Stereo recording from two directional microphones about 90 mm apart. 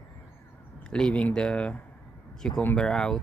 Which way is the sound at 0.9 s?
10° left (ahead or behind).